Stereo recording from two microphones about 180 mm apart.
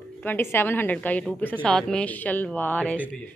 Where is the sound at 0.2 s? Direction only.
10° left (ahead or behind).